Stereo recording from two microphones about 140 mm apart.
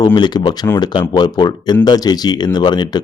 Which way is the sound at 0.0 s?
30° left (ahead or behind).